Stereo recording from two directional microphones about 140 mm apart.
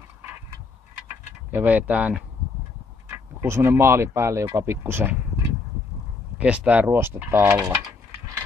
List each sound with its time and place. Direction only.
1.5 s speech: 10° right (ahead or behind)
6.3 s speech: 10° right (ahead or behind)
7.6 s speech: 25° right (ahead or behind)